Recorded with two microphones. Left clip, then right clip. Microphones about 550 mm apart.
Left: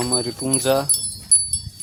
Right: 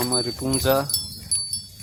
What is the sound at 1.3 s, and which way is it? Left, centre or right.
Wind chime, centre.